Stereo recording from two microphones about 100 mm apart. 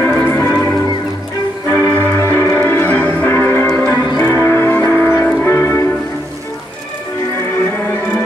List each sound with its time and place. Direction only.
0.0 s music: 25° left (ahead or behind)